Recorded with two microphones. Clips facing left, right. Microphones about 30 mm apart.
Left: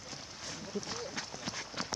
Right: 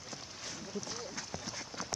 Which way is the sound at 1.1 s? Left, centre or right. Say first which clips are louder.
Left 2 dB; left.